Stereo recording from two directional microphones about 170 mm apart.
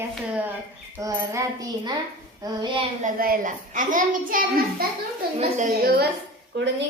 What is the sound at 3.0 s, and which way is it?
A child's voice, 55° right (ahead or behind).